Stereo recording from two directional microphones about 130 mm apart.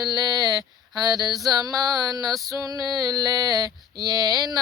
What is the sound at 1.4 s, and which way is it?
Mantra, 30° right (ahead or behind).